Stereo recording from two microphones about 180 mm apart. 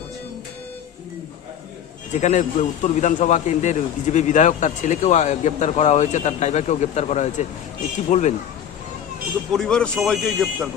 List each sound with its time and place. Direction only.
2.2 s a man's voice: 40° left (ahead or behind)
9.5 s speech: 5° left (ahead or behind)